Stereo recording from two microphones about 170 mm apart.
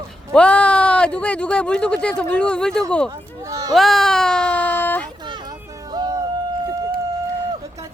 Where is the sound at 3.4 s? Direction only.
20° right (ahead or behind).